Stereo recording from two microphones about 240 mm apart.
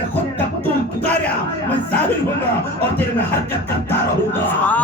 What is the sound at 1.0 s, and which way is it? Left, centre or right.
Music, centre.